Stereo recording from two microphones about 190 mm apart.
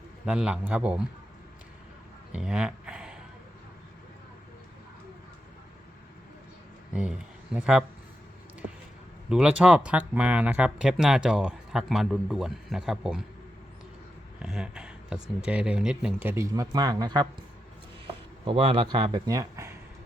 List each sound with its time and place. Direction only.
0.3 s speech: 5° right (ahead or behind)
2.3 s a sound: 5° right (ahead or behind)
7.5 s speech: 5° right (ahead or behind)
9.3 s speech: 5° right (ahead or behind)
14.4 s speech: 5° right (ahead or behind); by 17.2 s 20° right (ahead or behind)
18.4 s a man's voice: 30° right (ahead or behind)